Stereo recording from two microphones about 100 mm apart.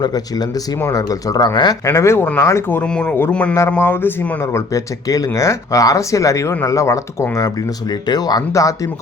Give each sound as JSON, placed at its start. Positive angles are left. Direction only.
{"t": 0.0, "sound": "speech", "side_deg": 40}
{"t": 1.8, "sound": "speech", "side_deg": 30}
{"t": 2.8, "sound": "speech", "side_deg": 10}
{"t": 3.7, "sound": "speech", "side_deg": 20}
{"t": 4.5, "sound": "speech", "side_deg": 35}